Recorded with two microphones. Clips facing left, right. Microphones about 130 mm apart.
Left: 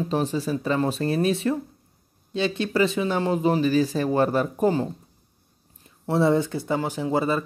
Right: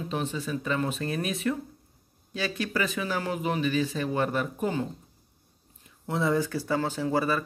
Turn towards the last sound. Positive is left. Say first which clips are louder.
# left 3 dB
turn(degrees=20)  # may be behind; listen again after turning